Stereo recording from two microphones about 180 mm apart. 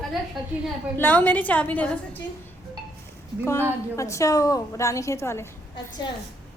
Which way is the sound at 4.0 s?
15° left (ahead or behind).